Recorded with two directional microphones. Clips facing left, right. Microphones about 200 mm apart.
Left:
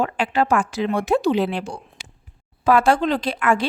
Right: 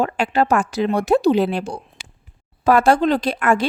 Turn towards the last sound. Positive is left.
turn(degrees=-45)  # may be behind; listen again after turning